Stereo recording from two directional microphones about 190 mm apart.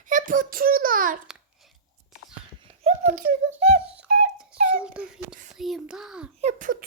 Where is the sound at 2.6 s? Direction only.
35° right (ahead or behind).